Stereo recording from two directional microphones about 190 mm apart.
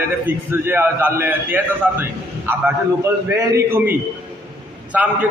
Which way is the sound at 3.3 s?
15° right (ahead or behind).